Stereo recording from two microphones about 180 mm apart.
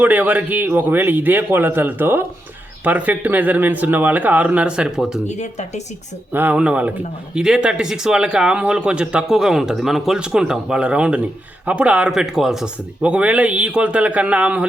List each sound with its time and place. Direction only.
0.0 s speech: 10° right (ahead or behind)
5.3 s speech: 40° left (ahead or behind)
6.3 s speech: 10° right (ahead or behind)